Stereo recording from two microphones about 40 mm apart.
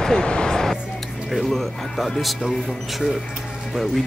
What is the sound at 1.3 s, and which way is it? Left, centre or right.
Speech, centre.